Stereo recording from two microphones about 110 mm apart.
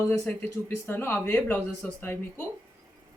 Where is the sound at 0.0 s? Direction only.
20° left (ahead or behind).